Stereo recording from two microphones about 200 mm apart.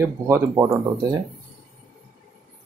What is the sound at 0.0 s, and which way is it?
Speech, 10° right (ahead or behind).